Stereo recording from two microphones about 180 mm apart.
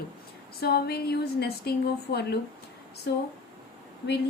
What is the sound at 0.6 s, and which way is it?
A woman's voice, 60° left (ahead or behind).